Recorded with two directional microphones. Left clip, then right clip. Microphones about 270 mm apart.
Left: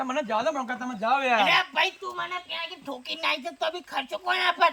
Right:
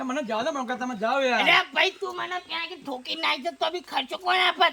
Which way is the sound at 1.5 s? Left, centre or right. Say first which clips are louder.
Right 2 dB; centre.